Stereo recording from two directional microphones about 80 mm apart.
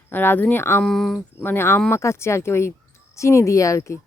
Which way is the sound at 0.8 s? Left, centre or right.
Centre.